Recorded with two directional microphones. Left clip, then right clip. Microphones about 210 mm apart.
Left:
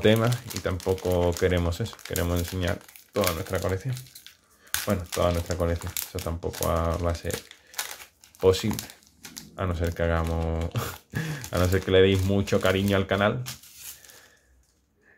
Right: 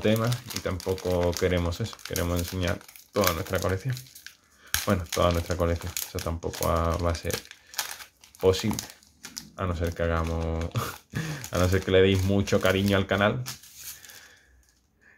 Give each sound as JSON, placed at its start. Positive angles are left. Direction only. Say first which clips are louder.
{"t": 0.0, "sound": "speech", "louder": "left 4 dB", "side_deg": 15}
{"t": 0.3, "sound": "speech", "louder": "left 1 dB", "side_deg": -5}
{"t": 5.2, "sound": "speech", "louder": "even", "side_deg": -5}
{"t": 8.4, "sound": "speech", "louder": "left 2 dB", "side_deg": 0}